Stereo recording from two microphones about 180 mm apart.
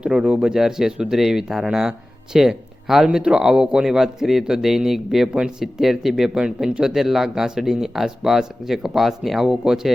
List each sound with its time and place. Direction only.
0.0 s speech: 5° right (ahead or behind)